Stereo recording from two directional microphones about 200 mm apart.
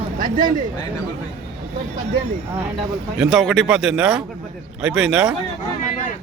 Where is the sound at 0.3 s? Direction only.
40° right (ahead or behind).